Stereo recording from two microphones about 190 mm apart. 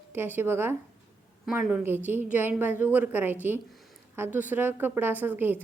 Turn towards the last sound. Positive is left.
turn(degrees=-10)  # may be behind; listen again after turning